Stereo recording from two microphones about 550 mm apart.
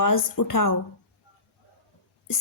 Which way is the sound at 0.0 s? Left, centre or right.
Left.